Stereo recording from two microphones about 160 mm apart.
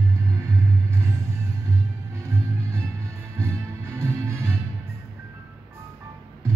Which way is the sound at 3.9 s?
15° right (ahead or behind).